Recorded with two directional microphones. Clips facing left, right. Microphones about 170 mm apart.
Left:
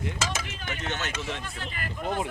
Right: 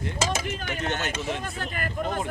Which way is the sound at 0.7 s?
50° right (ahead or behind).